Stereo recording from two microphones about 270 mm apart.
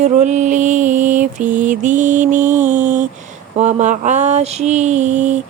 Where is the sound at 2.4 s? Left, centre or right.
Centre.